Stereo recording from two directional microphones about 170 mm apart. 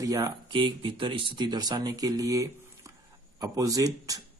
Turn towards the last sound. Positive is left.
turn(degrees=-20)  # may be behind; listen again after turning